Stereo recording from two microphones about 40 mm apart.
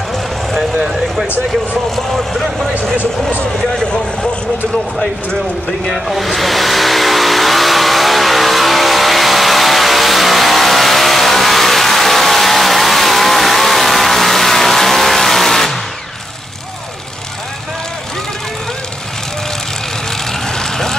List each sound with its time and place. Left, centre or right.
1.9 s speech: centre
3.8 s a sound: left
5.9 s vehicle: centre
20.4 s vehicle: centre